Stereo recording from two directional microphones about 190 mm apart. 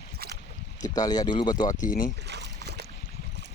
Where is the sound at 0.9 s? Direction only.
20° left (ahead or behind).